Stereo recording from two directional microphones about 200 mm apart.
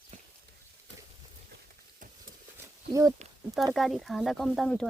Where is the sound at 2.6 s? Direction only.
15° right (ahead or behind).